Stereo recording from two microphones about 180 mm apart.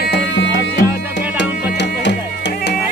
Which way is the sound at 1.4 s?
75° left (ahead or behind).